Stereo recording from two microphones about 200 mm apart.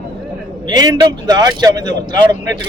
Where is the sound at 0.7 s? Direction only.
20° right (ahead or behind).